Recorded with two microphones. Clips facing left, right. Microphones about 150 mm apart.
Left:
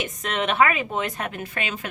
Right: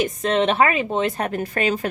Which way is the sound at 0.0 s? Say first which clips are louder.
Right 7 dB; 30° right (ahead or behind).